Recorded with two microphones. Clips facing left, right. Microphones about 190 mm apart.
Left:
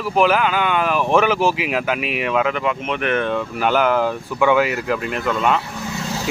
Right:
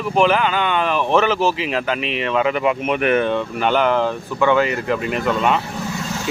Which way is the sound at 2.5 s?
10° right (ahead or behind).